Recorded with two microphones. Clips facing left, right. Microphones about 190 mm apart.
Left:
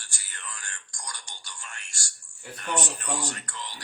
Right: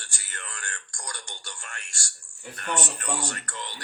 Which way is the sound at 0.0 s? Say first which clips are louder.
Right 2 dB; 60° right (ahead or behind).